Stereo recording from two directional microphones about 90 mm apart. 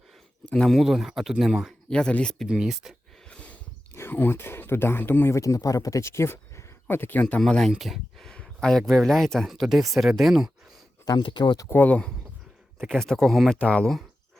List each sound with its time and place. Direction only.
0.5 s speech: centre (ahead or behind)
1.9 s speech: 10° left (ahead or behind)
2.5 s speech: 5° right (ahead or behind)
3.2 s snort: 15° left (ahead or behind)
3.9 s speech: 25° left (ahead or behind)
5.4 s speech: 40° left (ahead or behind); by 10.5 s centre (ahead or behind)
11.2 s speech: 55° left (ahead or behind)
11.6 s speech: 25° left (ahead or behind)
12.8 s speech: 5° left (ahead or behind)